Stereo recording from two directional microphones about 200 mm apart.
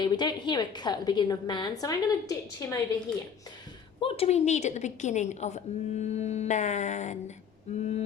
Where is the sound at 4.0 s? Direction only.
30° left (ahead or behind).